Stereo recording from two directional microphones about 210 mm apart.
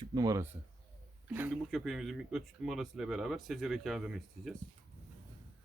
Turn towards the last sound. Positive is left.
turn(degrees=0)  # may be behind; listen again after turning